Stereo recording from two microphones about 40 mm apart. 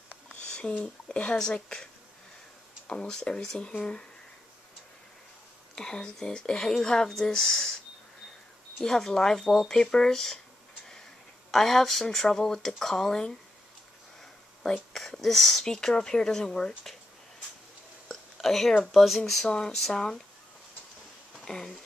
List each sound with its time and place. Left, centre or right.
0.3 s a sound: left
2.9 s speech: centre
5.8 s speech: centre
8.8 s speech: centre
11.5 s speech: centre
15.0 s speech: centre
18.4 s speech: centre
18.8 s speech: centre
19.4 s speech: centre
21.5 s speech: centre